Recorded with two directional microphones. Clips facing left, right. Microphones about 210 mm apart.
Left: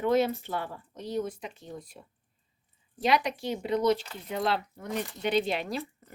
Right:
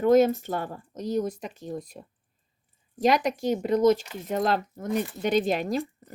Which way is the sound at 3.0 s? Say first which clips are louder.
Right 4 dB; 45° right (ahead or behind).